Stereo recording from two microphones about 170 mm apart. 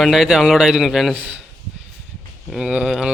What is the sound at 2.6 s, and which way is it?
Speech, 5° right (ahead or behind).